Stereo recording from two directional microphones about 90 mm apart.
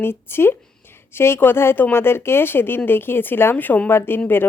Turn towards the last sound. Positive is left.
turn(degrees=25)  # may be behind; listen again after turning